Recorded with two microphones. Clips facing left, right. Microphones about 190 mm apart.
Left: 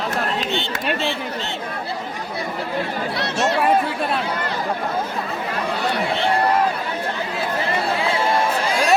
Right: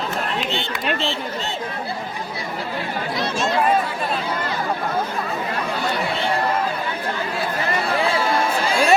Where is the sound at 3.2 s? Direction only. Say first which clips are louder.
Left 2 dB; 70° left (ahead or behind).